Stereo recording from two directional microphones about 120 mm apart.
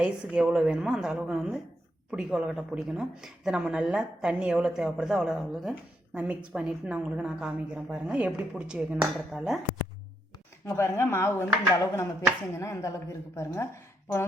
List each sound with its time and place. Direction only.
0.0 s speech: 10° right (ahead or behind)
10.8 s speech: 20° left (ahead or behind)